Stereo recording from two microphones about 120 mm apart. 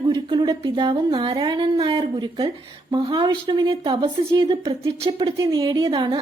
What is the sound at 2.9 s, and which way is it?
A woman's voice, 40° right (ahead or behind).